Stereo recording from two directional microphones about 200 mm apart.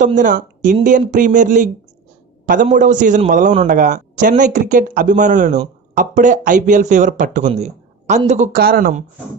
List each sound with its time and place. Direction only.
0.0 s a man's voice: 40° right (ahead or behind)